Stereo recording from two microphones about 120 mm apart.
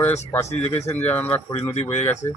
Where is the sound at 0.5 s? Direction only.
65° left (ahead or behind).